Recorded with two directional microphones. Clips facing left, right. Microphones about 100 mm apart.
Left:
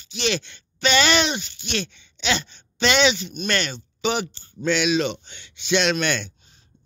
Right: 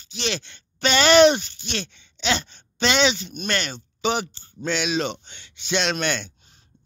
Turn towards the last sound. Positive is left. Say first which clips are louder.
# left 2 dB
turn(degrees=-30)  # may be behind; listen again after turning